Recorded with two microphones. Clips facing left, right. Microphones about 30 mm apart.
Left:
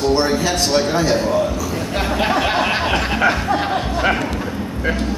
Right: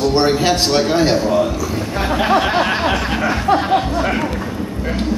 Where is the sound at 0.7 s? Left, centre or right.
Right.